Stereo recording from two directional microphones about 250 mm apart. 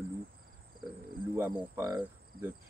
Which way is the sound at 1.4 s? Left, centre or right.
Centre.